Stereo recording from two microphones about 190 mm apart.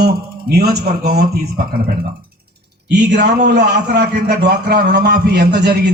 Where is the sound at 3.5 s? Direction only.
60° right (ahead or behind).